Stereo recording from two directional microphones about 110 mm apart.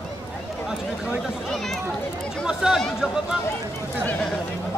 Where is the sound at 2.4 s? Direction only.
5° right (ahead or behind).